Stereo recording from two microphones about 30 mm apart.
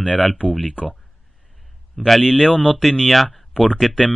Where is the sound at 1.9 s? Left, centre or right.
Centre.